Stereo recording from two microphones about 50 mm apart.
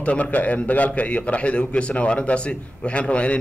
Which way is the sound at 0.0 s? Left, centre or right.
Left.